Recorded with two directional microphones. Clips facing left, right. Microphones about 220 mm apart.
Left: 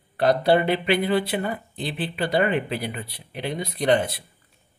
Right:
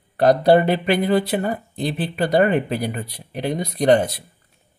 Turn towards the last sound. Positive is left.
turn(degrees=-45)  # may be behind; listen again after turning